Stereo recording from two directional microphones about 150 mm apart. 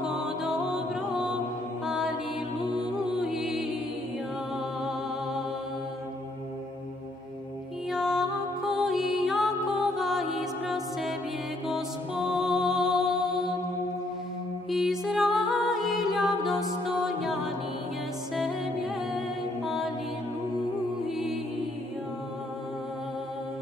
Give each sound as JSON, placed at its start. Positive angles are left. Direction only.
{"t": 0.0, "sound": "music", "side_deg": -5}
{"t": 1.9, "sound": "mantra", "side_deg": -5}
{"t": 3.2, "sound": "music", "side_deg": -5}
{"t": 7.9, "sound": "music", "side_deg": -5}
{"t": 12.4, "sound": "music", "side_deg": -5}
{"t": 14.7, "sound": "music", "side_deg": 0}
{"t": 18.3, "sound": "music", "side_deg": 0}